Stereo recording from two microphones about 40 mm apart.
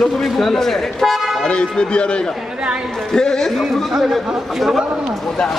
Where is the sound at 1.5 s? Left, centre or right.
Left.